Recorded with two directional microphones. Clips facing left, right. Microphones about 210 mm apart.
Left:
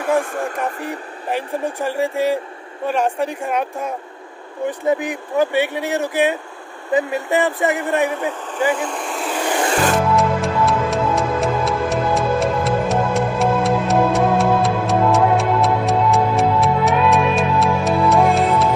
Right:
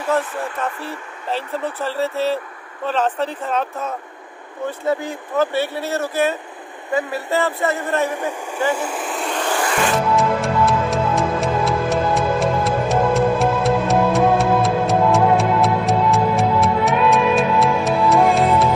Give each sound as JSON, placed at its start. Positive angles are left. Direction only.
{"t": 0.2, "sound": "speech", "side_deg": 45}
{"t": 0.8, "sound": "speech", "side_deg": 15}
{"t": 8.7, "sound": "vehicle", "side_deg": -5}
{"t": 10.1, "sound": "music", "side_deg": 0}